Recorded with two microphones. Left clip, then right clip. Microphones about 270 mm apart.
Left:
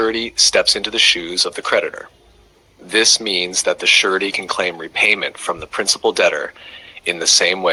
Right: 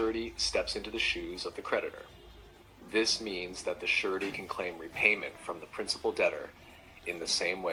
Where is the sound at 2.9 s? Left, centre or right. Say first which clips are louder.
Left 16 dB; left.